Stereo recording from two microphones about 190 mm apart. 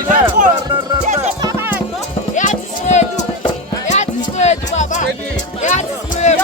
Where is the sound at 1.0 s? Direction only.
35° right (ahead or behind).